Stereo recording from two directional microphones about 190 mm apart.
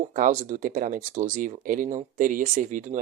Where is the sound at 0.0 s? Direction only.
45° right (ahead or behind).